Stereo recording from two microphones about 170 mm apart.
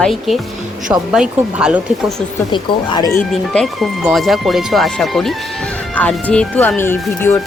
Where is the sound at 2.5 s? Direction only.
25° left (ahead or behind).